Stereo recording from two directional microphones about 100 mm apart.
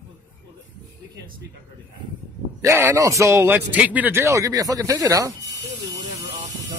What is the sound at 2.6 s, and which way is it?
A man's voice, 30° right (ahead or behind).